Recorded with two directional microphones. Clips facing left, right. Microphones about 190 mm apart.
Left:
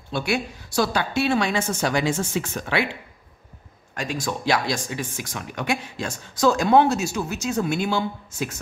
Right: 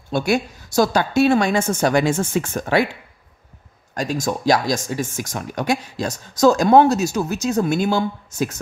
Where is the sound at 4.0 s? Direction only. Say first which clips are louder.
Right 5 dB; 40° right (ahead or behind).